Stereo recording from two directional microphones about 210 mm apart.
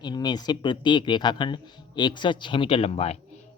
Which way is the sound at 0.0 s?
20° left (ahead or behind).